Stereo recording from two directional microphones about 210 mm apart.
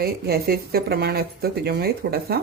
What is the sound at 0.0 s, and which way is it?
Speech, 45° right (ahead or behind).